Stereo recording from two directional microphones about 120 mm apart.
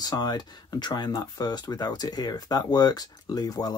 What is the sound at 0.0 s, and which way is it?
Speech, 35° left (ahead or behind).